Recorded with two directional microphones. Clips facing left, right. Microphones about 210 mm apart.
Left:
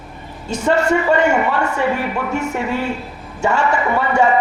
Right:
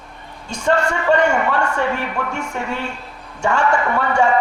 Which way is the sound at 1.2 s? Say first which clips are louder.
Left 1 dB; 5° left (ahead or behind).